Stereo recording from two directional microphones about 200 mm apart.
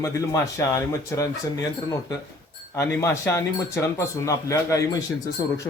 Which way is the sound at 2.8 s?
15° left (ahead or behind).